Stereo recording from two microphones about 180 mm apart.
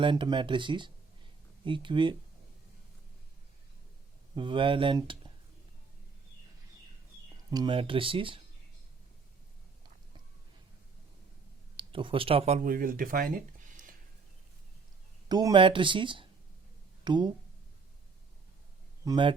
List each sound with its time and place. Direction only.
0.0 s speech: 25° right (ahead or behind)
4.4 s speech: 25° right (ahead or behind)
7.5 s speech: 25° right (ahead or behind)
11.8 s speech: 30° right (ahead or behind); by 13.4 s 50° right (ahead or behind)
15.3 s speech: 20° right (ahead or behind)
19.0 s a man's voice: 25° right (ahead or behind)